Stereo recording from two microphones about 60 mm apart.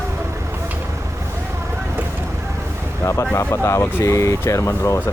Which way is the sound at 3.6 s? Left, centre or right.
Left.